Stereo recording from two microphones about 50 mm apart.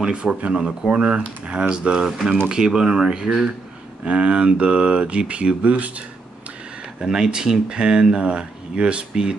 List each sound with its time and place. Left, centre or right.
0.0 s speech: centre
7.0 s speech: centre